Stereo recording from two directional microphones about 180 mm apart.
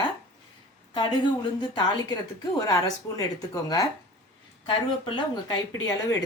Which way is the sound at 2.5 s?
20° left (ahead or behind).